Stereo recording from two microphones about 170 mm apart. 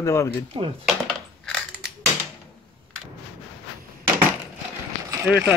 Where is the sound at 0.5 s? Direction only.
30° right (ahead or behind).